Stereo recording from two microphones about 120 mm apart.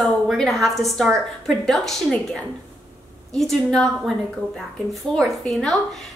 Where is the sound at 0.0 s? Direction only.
Centre (ahead or behind).